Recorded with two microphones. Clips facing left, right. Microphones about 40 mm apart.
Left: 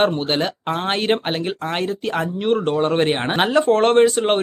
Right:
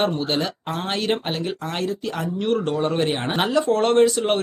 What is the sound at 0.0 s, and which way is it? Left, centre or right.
Speech, left.